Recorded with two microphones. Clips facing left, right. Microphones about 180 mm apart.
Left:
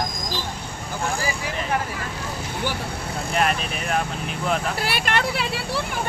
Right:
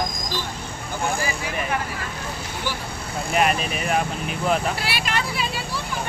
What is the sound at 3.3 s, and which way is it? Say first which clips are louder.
Speech: right 2 dB; 5° right (ahead or behind).